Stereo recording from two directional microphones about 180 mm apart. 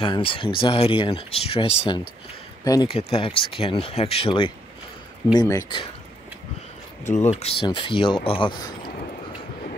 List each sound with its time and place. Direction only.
0.0 s speech: 30° left (ahead or behind)
2.6 s speech: 20° left (ahead or behind)
2.9 s speech: 30° left (ahead or behind)
7.1 s speech: 40° left (ahead or behind)